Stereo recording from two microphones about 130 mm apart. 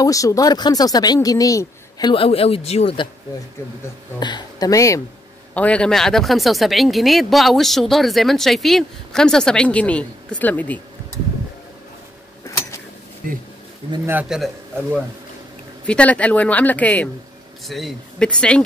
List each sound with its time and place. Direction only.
0.0 s speech: 25° left (ahead or behind); by 3.0 s 55° left (ahead or behind)
4.2 s speech: 30° left (ahead or behind)
5.5 s speech: 10° left (ahead or behind)
12.4 s a sound: 20° left (ahead or behind)
13.2 s speech: 90° right
14.3 s speech: 5° right (ahead or behind)
15.9 s speech: 10° left (ahead or behind)
17.6 s speech: centre (ahead or behind)